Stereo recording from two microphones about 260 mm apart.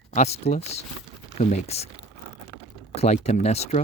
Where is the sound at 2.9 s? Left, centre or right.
Left.